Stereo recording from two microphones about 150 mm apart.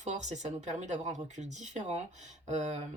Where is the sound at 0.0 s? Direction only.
50° right (ahead or behind).